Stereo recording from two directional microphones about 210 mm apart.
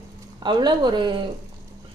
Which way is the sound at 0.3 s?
20° right (ahead or behind).